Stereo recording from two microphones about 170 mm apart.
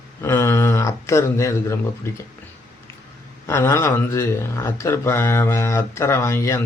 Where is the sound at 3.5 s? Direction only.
15° left (ahead or behind).